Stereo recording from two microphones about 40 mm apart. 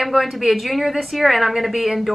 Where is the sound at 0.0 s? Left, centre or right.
Centre.